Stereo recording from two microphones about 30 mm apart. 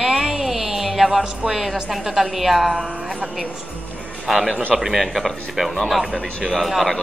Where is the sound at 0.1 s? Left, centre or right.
Right.